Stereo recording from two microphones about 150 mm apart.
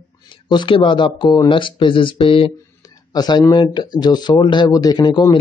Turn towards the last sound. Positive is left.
turn(degrees=30)  # may be behind; listen again after turning